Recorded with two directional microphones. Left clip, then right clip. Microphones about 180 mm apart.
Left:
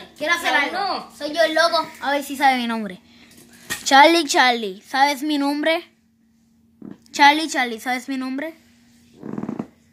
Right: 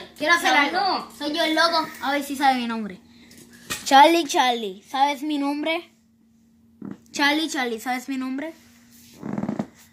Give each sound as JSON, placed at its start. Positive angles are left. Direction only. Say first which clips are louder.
{"t": 0.2, "sound": "a woman's voice", "louder": "right 1 dB", "side_deg": 25}
{"t": 3.8, "sound": "a woman's voice", "louder": "left 2 dB", "side_deg": 15}
{"t": 7.1, "sound": "a woman's voice", "louder": "left 7 dB", "side_deg": 30}